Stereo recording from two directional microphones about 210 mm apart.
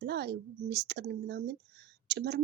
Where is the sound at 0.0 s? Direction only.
50° right (ahead or behind).